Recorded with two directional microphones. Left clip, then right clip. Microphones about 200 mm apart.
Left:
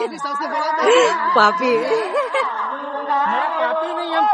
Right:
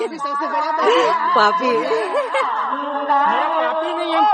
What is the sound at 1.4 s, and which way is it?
Speech, 10° left (ahead or behind).